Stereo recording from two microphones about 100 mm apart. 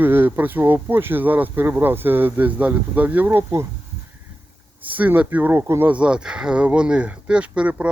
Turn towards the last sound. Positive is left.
turn(degrees=-15)  # may be behind; listen again after turning